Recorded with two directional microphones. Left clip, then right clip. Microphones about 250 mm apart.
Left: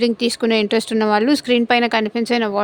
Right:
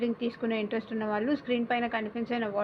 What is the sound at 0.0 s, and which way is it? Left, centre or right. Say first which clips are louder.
A woman's voice: left 13 dB; left.